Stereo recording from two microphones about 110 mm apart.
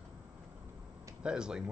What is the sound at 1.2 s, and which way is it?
Speech, 5° right (ahead or behind).